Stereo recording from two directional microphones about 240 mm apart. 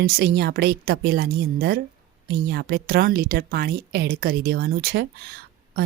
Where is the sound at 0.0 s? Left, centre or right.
Right.